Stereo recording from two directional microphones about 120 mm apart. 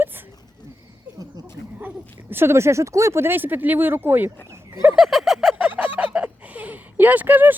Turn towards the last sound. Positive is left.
turn(degrees=-15)  # may be behind; listen again after turning